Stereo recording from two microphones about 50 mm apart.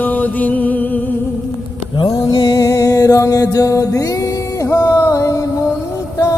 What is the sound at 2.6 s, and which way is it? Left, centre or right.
Music, left.